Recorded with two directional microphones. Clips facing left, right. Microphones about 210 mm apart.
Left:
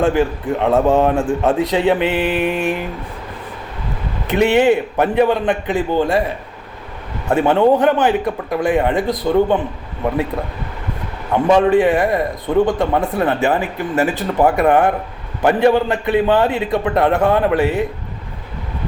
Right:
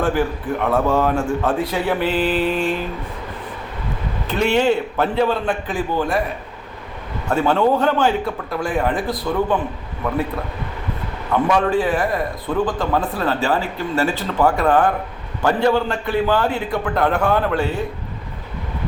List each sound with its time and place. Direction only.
0.0 s speech: 20° left (ahead or behind)
4.3 s a man's voice: 20° left (ahead or behind)
7.3 s speech: 20° left (ahead or behind)
11.4 s speech: 25° left (ahead or behind)